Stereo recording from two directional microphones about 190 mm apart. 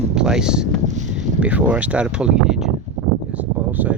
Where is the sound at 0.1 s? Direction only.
5° right (ahead or behind).